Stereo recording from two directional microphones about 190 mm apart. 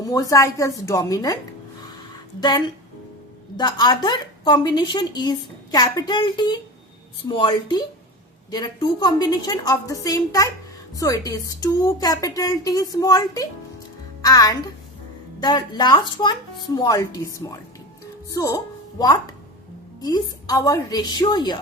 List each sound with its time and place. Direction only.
0.0 s a woman's voice: 20° left (ahead or behind)
3.6 s a woman's voice: 25° left (ahead or behind)